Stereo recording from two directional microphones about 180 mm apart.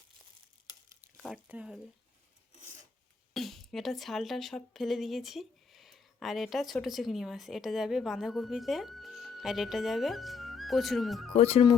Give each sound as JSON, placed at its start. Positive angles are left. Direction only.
{"t": 1.1, "sound": "speech", "side_deg": -5}
{"t": 3.3, "sound": "speech", "side_deg": 0}
{"t": 11.3, "sound": "speech", "side_deg": 35}